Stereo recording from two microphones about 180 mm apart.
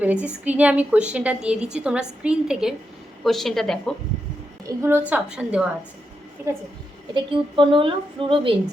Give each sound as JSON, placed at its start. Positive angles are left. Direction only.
{"t": 0.0, "sound": "a woman's voice", "side_deg": -10}
{"t": 4.6, "sound": "a woman's voice", "side_deg": -15}
{"t": 7.1, "sound": "a woman's voice", "side_deg": -30}